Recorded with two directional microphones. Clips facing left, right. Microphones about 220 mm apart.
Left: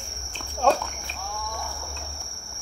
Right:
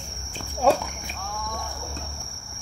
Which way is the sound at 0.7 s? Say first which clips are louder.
Right 2 dB; 10° right (ahead or behind).